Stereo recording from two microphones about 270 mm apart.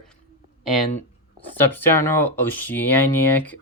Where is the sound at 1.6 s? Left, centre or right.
Centre.